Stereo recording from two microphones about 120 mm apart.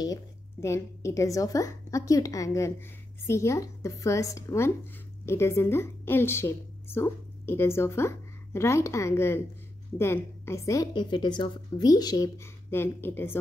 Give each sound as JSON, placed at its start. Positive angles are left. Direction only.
{"t": 0.0, "sound": "a woman's voice", "side_deg": 25}
{"t": 11.0, "sound": "speech", "side_deg": 40}
{"t": 11.9, "sound": "speech", "side_deg": 30}